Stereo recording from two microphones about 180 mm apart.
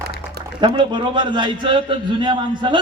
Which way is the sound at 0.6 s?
25° right (ahead or behind).